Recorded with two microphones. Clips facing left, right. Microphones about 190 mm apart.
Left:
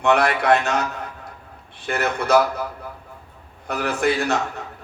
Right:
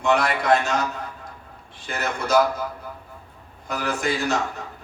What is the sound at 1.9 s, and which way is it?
Speech, 60° left (ahead or behind).